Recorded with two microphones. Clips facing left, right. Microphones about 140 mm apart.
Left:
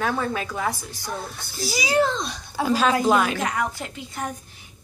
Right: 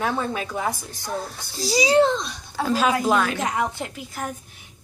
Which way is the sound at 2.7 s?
Centre (ahead or behind).